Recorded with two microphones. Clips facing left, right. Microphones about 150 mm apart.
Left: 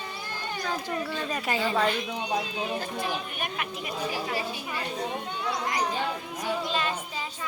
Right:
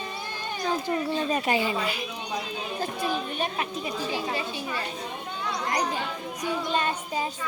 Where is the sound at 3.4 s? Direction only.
30° right (ahead or behind).